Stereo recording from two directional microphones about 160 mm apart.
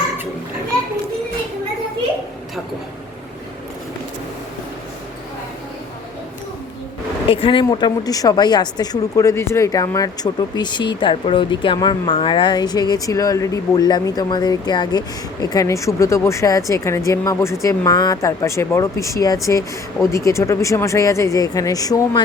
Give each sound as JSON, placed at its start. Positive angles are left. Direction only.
{"t": 7.3, "sound": "speech", "side_deg": 35}